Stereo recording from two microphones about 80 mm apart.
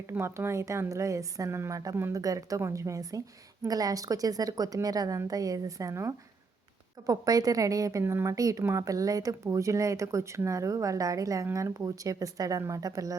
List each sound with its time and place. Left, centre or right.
0.1 s a woman's voice: right
2.1 s a woman's voice: right
7.1 s a woman's voice: right
8.0 s a woman's voice: right